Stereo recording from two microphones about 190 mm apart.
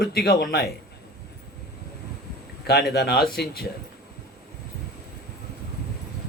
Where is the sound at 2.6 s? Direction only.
60° left (ahead or behind).